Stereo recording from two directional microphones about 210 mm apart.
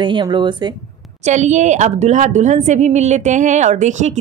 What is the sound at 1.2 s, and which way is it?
A woman's voice, 35° right (ahead or behind).